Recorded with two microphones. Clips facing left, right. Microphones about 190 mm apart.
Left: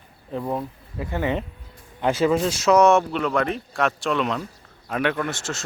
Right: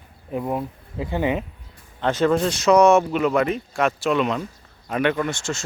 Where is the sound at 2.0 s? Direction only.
10° left (ahead or behind).